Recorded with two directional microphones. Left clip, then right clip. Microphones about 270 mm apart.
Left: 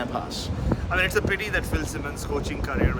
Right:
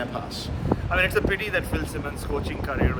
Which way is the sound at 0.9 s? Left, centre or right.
Centre.